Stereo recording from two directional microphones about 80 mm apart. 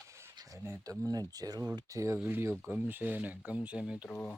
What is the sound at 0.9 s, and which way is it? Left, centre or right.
Speech, right.